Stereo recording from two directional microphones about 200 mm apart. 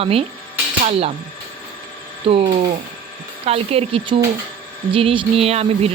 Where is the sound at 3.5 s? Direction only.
30° right (ahead or behind).